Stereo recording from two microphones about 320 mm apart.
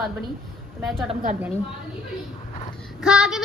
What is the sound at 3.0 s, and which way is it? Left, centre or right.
Speech, centre.